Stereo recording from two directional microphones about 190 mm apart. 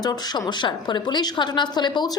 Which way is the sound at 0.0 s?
20° left (ahead or behind).